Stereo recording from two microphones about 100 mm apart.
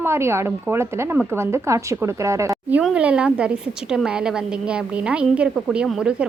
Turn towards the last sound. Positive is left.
turn(degrees=-10)  # may be behind; listen again after turning